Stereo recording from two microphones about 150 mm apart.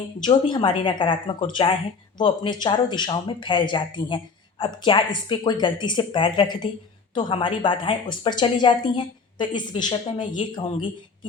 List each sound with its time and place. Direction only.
0.3 s a woman's voice: 30° left (ahead or behind)